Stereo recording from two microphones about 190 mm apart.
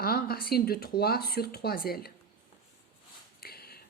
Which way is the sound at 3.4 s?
55° left (ahead or behind).